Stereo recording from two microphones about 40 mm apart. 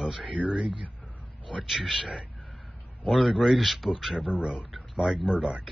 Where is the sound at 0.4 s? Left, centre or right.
Centre.